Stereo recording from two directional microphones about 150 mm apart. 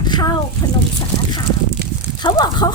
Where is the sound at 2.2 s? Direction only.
30° left (ahead or behind).